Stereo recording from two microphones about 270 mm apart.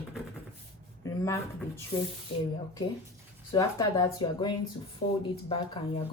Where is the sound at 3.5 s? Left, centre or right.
Centre.